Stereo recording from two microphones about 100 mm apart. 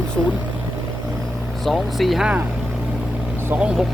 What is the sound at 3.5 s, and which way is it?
Speech, 10° right (ahead or behind).